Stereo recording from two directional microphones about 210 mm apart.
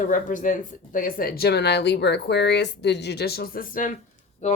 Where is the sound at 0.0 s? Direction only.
40° left (ahead or behind).